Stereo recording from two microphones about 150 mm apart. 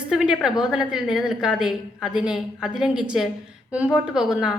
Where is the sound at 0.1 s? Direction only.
5° right (ahead or behind).